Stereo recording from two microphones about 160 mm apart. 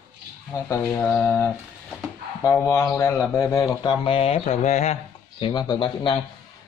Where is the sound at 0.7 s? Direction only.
15° left (ahead or behind).